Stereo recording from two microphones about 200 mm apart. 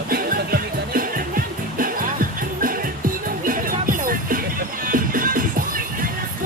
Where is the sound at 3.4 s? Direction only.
45° right (ahead or behind).